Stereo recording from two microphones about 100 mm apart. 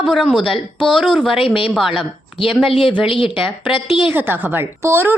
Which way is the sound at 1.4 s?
65° left (ahead or behind).